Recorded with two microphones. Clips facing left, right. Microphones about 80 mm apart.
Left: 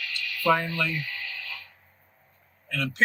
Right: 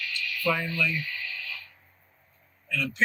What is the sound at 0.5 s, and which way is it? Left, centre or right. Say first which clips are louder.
Speech: left 6 dB; left.